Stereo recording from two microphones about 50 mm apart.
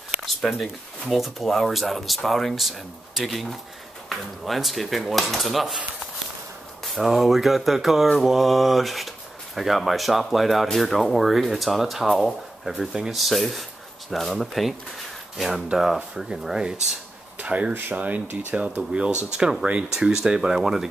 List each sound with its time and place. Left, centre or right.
0.2 s a sound: centre
1.1 s speech: centre
7.0 s speech: centre
17.4 s speech: right; by 20.9 s centre